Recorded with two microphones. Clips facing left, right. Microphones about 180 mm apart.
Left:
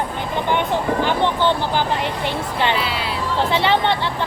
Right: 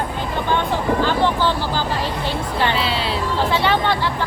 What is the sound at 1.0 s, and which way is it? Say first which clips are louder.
Vehicle: even; 20° left (ahead or behind).